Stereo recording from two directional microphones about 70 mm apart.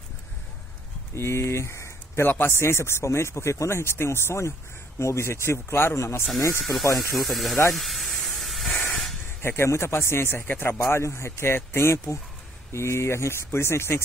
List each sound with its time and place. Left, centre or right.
1.1 s speech: left
6.6 s speech: centre
7.7 s hiss: centre
9.4 s speech: left
10.8 s speech: left